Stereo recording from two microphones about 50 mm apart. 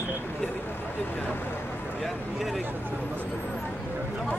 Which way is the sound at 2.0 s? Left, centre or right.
Centre.